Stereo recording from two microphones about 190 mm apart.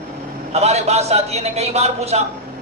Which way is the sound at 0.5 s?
35° right (ahead or behind).